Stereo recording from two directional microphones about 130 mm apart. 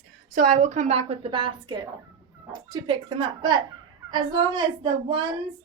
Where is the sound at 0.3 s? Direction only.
70° right (ahead or behind).